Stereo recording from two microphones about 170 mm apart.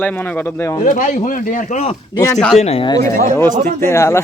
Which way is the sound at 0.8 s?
50° left (ahead or behind).